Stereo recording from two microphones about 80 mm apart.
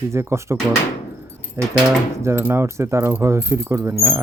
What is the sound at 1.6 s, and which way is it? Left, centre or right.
Speech, right.